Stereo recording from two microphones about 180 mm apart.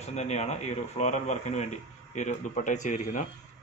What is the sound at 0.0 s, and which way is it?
A man's voice, 40° left (ahead or behind).